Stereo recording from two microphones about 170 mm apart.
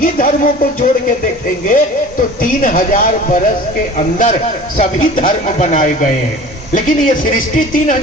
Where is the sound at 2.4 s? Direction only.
50° left (ahead or behind).